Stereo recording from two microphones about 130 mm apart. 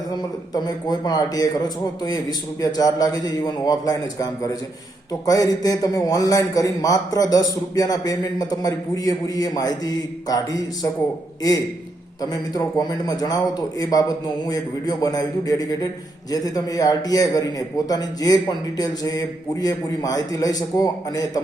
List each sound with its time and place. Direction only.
0.5 s a man's voice: 30° left (ahead or behind)
12.2 s a man's voice: 30° left (ahead or behind)